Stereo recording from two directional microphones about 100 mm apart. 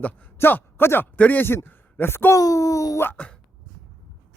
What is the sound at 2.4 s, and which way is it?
Speech, 35° left (ahead or behind).